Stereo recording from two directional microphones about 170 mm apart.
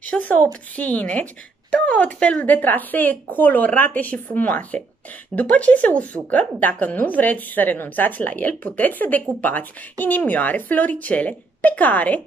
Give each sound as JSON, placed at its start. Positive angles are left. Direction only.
{"t": 0.0, "sound": "a woman's voice", "side_deg": 10}